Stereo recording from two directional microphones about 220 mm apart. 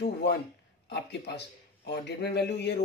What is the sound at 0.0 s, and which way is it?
Speech, 50° left (ahead or behind).